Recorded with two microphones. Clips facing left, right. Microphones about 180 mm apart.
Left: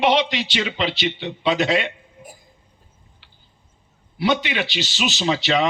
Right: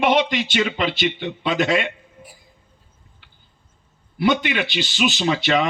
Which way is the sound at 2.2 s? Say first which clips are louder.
Left 4 dB; 45° left (ahead or behind).